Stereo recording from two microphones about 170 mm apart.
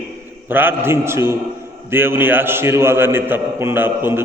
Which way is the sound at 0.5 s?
10° right (ahead or behind).